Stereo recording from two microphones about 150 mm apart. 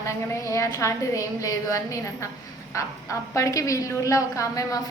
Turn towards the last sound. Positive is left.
turn(degrees=20)  # may be behind; listen again after turning